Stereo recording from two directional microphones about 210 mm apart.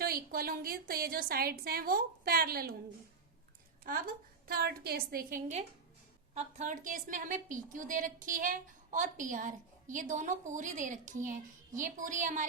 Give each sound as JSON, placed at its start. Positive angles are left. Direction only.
{"t": 0.0, "sound": "a woman's voice", "side_deg": -45}
{"t": 3.8, "sound": "a woman's voice", "side_deg": -45}
{"t": 6.3, "sound": "a woman's voice", "side_deg": -30}